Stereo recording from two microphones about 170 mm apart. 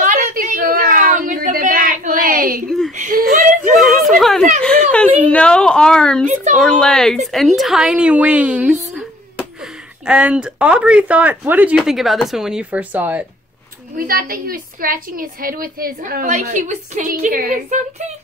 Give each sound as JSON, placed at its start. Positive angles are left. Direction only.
{"t": 0.0, "sound": "a sound", "side_deg": -50}
{"t": 3.7, "sound": "a sound", "side_deg": 0}
{"t": 6.2, "sound": "speech", "side_deg": -45}
{"t": 6.6, "sound": "speech", "side_deg": 5}
{"t": 10.0, "sound": "speech", "side_deg": -5}
{"t": 13.9, "sound": "a woman's voice", "side_deg": -60}